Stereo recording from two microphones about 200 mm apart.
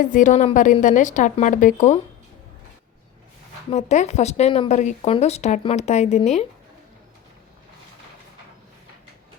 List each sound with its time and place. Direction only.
0.0 s speech: 40° left (ahead or behind)
3.7 s speech: 35° left (ahead or behind)